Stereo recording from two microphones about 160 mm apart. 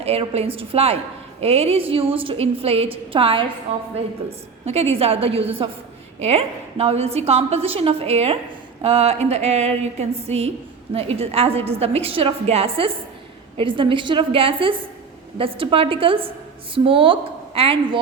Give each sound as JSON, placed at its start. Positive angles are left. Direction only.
{"t": 0.0, "sound": "a woman's voice", "side_deg": -40}